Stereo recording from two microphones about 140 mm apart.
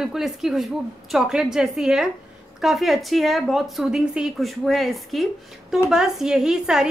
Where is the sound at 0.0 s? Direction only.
5° right (ahead or behind).